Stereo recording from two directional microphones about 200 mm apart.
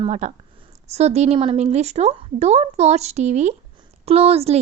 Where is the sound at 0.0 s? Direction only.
35° right (ahead or behind).